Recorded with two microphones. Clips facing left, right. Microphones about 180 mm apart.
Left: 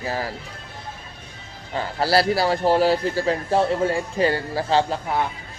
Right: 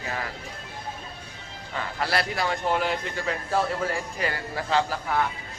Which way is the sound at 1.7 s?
30° left (ahead or behind).